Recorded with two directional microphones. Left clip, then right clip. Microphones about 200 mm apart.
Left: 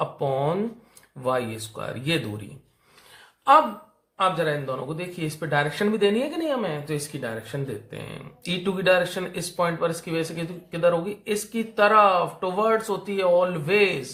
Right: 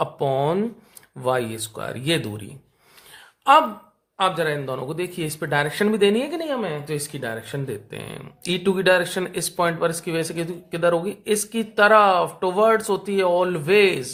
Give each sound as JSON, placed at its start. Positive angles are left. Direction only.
{"t": 0.0, "sound": "a sound", "side_deg": -50}
{"t": 1.2, "sound": "speech", "side_deg": -45}
{"t": 4.2, "sound": "speech", "side_deg": -50}